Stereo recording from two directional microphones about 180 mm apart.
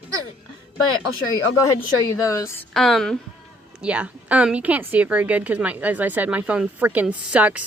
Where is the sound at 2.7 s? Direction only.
Centre (ahead or behind).